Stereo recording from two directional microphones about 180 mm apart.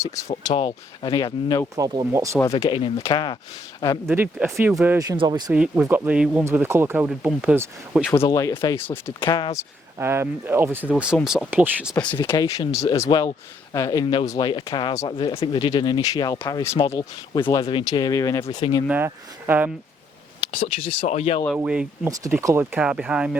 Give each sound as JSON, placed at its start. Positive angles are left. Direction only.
{"t": 0.0, "sound": "speech", "side_deg": 15}
{"t": 1.7, "sound": "speech", "side_deg": -20}
{"t": 2.6, "sound": "speech", "side_deg": 25}
{"t": 4.1, "sound": "speech", "side_deg": -10}
{"t": 5.5, "sound": "speech", "side_deg": -5}
{"t": 8.3, "sound": "speech", "side_deg": 20}
{"t": 9.2, "sound": "speech", "side_deg": 25}
{"t": 10.0, "sound": "speech", "side_deg": -15}
{"t": 12.3, "sound": "speech", "side_deg": 20}
{"t": 18.9, "sound": "speech", "side_deg": -10}
{"t": 20.5, "sound": "speech", "side_deg": 30}
{"t": 21.5, "sound": "speech", "side_deg": -5}